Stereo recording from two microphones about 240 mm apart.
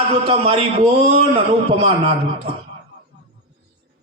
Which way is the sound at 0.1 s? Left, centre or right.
Right.